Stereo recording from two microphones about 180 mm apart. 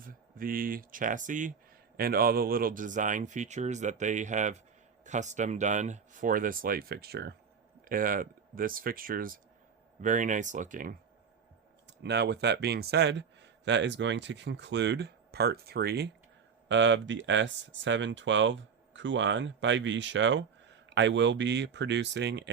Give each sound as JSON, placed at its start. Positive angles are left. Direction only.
{"t": 0.0, "sound": "speech", "side_deg": -50}
{"t": 7.9, "sound": "speech", "side_deg": -50}
{"t": 12.0, "sound": "a man's voice", "side_deg": -70}
{"t": 16.6, "sound": "speech", "side_deg": -90}